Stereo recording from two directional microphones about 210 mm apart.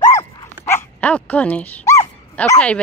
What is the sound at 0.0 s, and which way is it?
Dog, 15° left (ahead or behind).